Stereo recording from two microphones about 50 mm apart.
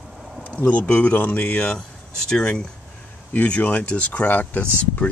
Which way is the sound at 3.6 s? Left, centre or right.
Left.